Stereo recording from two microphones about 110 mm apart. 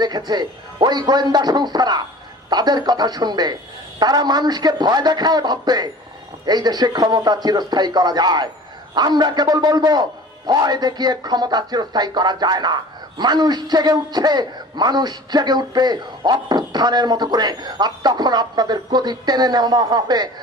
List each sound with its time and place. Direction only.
0.0 s a man's voice: 40° right (ahead or behind)